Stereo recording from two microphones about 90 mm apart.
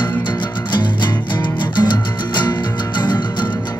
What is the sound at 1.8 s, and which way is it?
Music, 55° left (ahead or behind).